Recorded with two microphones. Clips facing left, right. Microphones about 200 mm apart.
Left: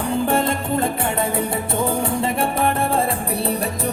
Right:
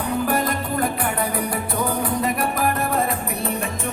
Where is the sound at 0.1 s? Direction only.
25° left (ahead or behind).